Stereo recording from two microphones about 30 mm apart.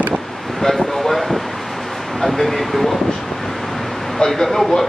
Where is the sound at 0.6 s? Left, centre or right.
Centre.